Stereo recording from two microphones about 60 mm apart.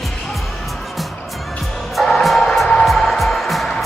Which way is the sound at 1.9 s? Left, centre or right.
Centre.